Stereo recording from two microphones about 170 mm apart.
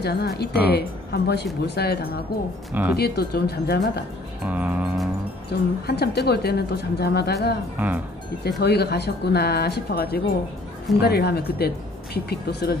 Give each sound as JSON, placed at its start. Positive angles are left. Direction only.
{"t": 0.0, "sound": "a woman's voice", "side_deg": 70}
{"t": 2.7, "sound": "music", "side_deg": -10}
{"t": 3.0, "sound": "a woman's voice", "side_deg": 70}
{"t": 4.4, "sound": "music", "side_deg": -10}
{"t": 5.9, "sound": "a woman's voice", "side_deg": 75}
{"t": 7.7, "sound": "music", "side_deg": -10}
{"t": 8.5, "sound": "a woman's voice", "side_deg": 75}